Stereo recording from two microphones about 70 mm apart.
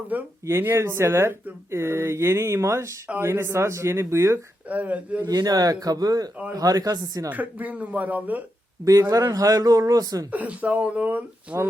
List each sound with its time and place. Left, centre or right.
0.1 s speech: right
0.4 s speech: right
4.7 s speech: right
5.2 s speech: right
7.3 s speech: right
8.8 s speech: right
10.3 s speech: right